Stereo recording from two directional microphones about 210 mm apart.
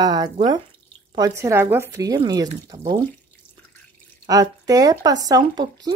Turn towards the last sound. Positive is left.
turn(degrees=-20)  # may be behind; listen again after turning